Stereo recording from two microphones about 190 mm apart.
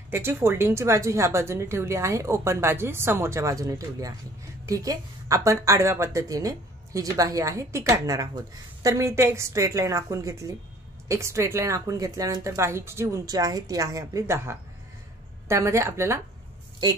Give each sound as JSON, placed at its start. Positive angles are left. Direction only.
{"t": 0.1, "sound": "a woman's voice", "side_deg": -10}